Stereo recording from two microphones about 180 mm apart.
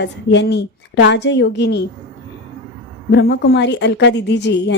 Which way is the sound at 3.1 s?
70° left (ahead or behind).